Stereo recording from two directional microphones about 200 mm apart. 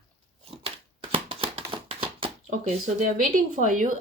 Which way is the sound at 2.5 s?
40° right (ahead or behind).